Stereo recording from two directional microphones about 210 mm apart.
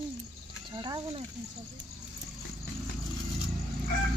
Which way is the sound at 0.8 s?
20° right (ahead or behind).